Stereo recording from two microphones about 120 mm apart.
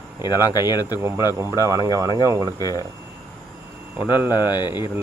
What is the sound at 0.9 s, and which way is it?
Speech, 20° right (ahead or behind).